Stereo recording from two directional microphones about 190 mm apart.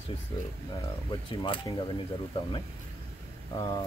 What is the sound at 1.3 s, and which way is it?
Speech, 25° left (ahead or behind).